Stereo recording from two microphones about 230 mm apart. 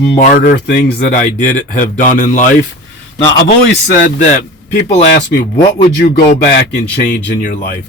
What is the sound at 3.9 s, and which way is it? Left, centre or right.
Speech, left.